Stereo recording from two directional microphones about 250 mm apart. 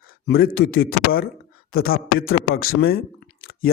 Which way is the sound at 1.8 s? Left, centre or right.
Left.